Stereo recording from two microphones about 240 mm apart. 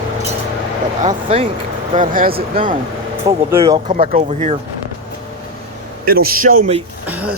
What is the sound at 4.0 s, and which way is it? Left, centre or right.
Speech, right.